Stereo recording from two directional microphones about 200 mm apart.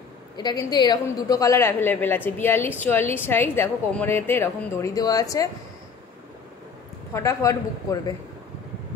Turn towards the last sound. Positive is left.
turn(degrees=15)  # may be behind; listen again after turning